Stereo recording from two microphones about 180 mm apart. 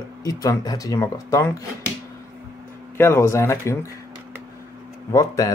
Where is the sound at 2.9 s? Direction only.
15° left (ahead or behind).